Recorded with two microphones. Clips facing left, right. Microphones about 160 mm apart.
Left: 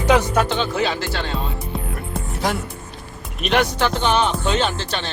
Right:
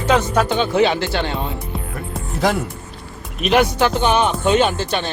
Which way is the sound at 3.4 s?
5° right (ahead or behind).